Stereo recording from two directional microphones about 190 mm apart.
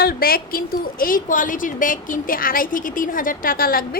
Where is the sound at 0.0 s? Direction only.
50° left (ahead or behind).